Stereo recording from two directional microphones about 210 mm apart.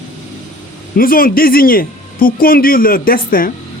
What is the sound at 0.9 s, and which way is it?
Speech, 45° left (ahead or behind).